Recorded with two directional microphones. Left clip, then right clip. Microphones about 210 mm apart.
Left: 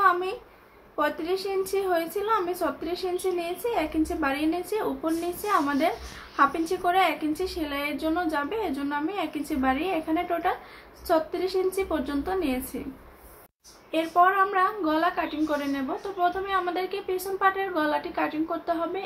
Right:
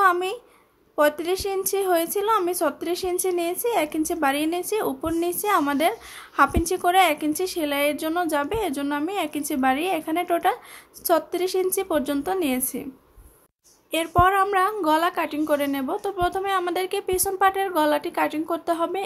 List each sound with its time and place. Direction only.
0.0 s a sound: 50° right (ahead or behind)
0.9 s a woman's voice: 50° right (ahead or behind)
13.9 s a woman's voice: 50° right (ahead or behind)